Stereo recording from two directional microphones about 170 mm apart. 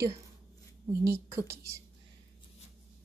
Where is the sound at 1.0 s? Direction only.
15° right (ahead or behind).